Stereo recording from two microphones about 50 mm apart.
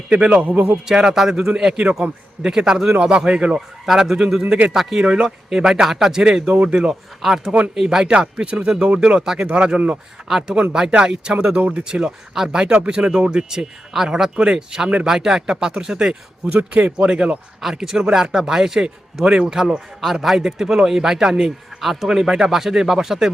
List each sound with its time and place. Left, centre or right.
0.4 s a man's voice: right
0.9 s a man's voice: centre
3.8 s a man's voice: centre
6.5 s speech: right
7.2 s a man's voice: centre; by 10.0 s right
10.2 s a man's voice: centre
10.5 s a man's voice: right
16.5 s speech: right
17.6 s a man's voice: centre